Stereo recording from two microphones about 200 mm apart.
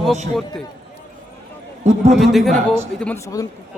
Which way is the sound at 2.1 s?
Centre (ahead or behind).